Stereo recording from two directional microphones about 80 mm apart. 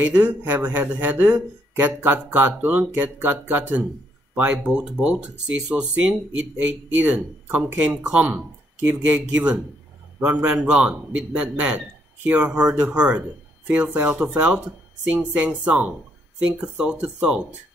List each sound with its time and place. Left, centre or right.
0.0 s a man's voice: centre